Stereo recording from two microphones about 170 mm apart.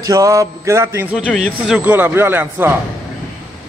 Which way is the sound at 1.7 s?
10° right (ahead or behind).